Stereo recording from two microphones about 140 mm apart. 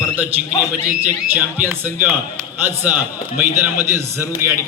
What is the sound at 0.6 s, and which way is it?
A man's voice, 10° right (ahead or behind).